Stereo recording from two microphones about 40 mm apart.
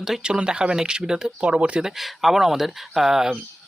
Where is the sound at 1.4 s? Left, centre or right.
Right.